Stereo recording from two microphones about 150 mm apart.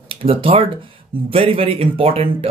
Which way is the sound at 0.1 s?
40° right (ahead or behind).